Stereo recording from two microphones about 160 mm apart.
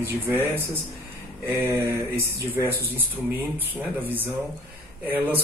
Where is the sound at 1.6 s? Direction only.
15° right (ahead or behind).